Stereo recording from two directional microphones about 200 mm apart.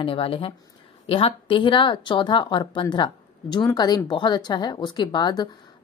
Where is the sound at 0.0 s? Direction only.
25° left (ahead or behind).